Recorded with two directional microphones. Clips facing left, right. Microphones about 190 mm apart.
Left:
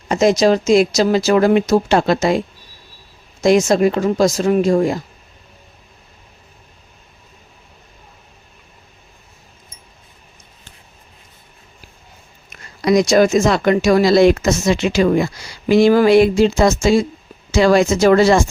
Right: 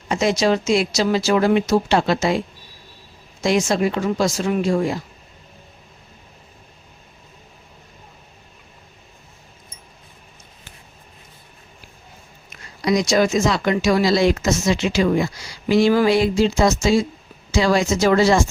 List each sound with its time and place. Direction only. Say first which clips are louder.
0.1 s speech: left 5 dB; 45° left (ahead or behind)
3.4 s speech: left 6 dB; 45° left (ahead or behind)
12.5 s speech: left 4 dB; 55° left (ahead or behind)